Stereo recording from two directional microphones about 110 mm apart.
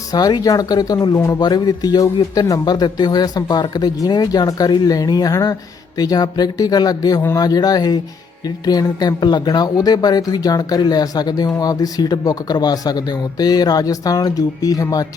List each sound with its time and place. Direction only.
0.1 s speech: 35° left (ahead or behind)